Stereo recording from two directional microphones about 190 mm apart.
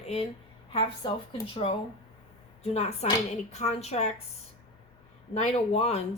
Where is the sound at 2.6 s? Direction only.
35° left (ahead or behind).